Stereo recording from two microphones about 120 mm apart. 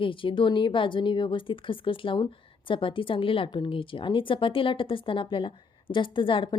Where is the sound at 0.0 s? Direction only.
45° left (ahead or behind).